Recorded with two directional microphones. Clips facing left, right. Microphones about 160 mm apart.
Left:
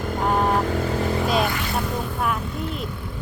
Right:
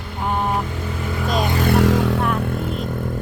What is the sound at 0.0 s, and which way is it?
Vehicle, 40° left (ahead or behind).